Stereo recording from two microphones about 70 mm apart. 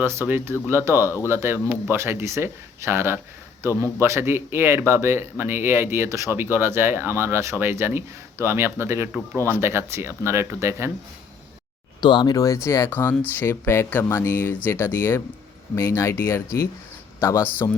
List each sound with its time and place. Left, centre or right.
0.0 s a man's voice: right
11.9 s speech: left
12.6 s speech: left
12.9 s speech: left
15.7 s speech: left